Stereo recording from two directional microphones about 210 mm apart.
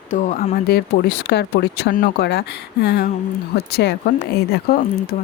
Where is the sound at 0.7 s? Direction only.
50° left (ahead or behind).